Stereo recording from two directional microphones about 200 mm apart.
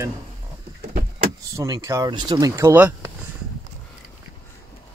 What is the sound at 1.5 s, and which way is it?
Speech, 15° right (ahead or behind).